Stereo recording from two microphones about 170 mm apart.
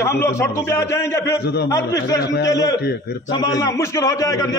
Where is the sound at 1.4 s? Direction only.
70° left (ahead or behind).